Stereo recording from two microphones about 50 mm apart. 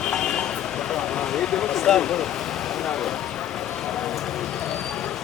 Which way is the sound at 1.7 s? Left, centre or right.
Centre.